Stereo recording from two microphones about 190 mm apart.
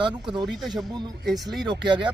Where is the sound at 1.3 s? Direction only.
Centre (ahead or behind).